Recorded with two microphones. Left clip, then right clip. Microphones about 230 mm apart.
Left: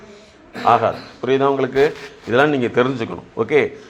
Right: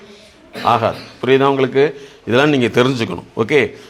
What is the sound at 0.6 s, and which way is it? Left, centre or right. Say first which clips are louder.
A man's voice: even; right.